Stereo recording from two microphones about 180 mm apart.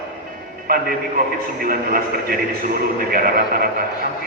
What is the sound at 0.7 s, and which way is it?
Speech, 55° right (ahead or behind).